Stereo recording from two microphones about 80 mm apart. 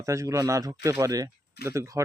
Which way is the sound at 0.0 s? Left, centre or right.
Right.